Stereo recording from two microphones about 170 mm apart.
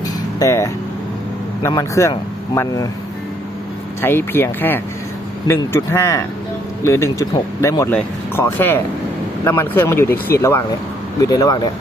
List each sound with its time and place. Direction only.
0.3 s speech: 20° left (ahead or behind)
4.0 s speech: 10° left (ahead or behind)